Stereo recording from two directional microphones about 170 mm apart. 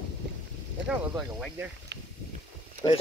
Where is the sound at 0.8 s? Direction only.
5° right (ahead or behind).